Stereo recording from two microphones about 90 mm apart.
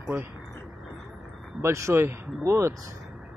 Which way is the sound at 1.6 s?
35° right (ahead or behind).